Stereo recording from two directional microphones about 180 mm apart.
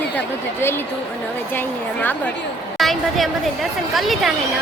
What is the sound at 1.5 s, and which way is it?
A woman's voice, 10° left (ahead or behind).